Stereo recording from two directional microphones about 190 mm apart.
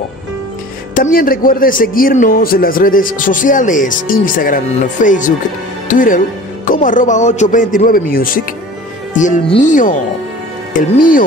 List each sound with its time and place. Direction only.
0.9 s a man's voice: 45° left (ahead or behind)